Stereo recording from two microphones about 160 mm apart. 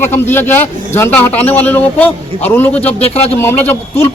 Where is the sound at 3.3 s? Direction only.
10° left (ahead or behind).